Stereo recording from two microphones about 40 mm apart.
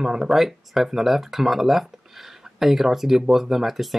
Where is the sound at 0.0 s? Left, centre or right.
Centre.